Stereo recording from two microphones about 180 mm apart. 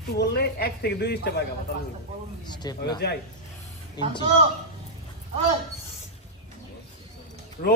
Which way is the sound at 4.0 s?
25° left (ahead or behind).